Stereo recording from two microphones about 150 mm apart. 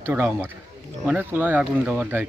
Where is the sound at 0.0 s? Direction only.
15° right (ahead or behind).